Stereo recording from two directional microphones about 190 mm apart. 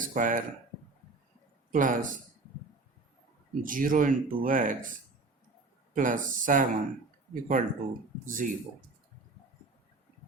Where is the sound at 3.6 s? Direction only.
45° right (ahead or behind).